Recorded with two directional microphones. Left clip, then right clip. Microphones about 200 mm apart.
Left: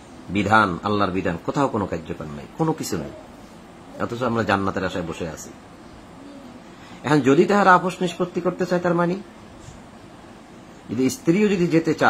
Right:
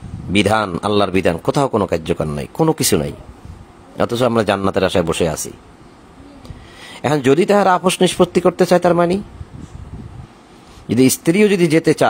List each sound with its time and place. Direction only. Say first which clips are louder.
0.3 s speech: right 2 dB; 55° right (ahead or behind)
7.0 s speech: right 3 dB; 55° right (ahead or behind)
11.0 s speech: right 7 dB; 55° right (ahead or behind)